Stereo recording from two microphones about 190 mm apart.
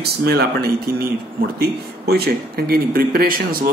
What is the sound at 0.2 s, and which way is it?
Speech, 55° right (ahead or behind).